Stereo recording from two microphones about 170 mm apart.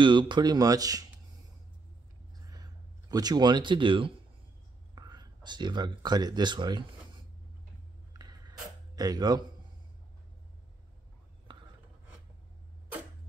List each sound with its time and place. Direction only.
0.0 s speech: 30° right (ahead or behind)
2.5 s a sound: 20° right (ahead or behind)
4.9 s speech: 25° right (ahead or behind)
8.1 s a sound: 25° right (ahead or behind)
8.9 s speech: 20° right (ahead or behind)
11.5 s writing: 30° right (ahead or behind)